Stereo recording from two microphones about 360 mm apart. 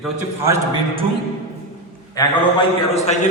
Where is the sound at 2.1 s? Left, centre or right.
Centre.